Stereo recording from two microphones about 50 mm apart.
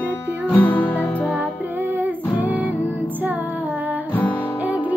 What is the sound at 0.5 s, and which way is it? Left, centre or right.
Music, left.